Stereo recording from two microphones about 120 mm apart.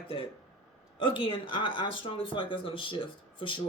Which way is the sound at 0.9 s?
45° left (ahead or behind).